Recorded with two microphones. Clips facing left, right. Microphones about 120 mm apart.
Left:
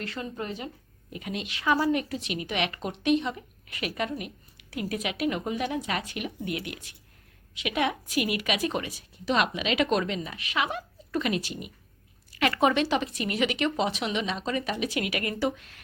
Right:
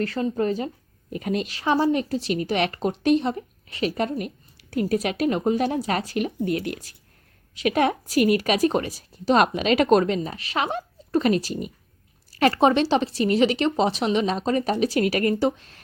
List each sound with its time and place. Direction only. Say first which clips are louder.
0.0 s speech: right 11 dB; 35° right (ahead or behind)